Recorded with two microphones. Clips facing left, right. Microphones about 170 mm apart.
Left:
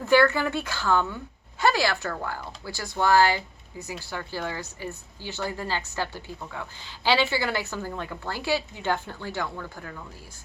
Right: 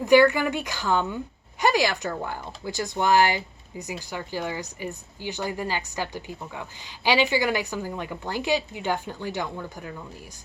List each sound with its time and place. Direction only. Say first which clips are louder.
0.0 s a woman's voice: right 3 dB; 15° right (ahead or behind)